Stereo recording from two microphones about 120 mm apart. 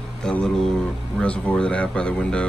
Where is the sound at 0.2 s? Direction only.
5° left (ahead or behind).